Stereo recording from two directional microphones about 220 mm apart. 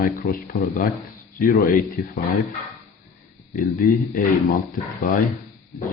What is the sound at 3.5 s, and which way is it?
Speech, 40° left (ahead or behind).